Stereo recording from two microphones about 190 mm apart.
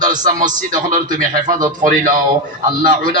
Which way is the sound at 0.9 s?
45° right (ahead or behind).